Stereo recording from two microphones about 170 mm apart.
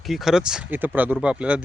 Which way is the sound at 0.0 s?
Centre (ahead or behind).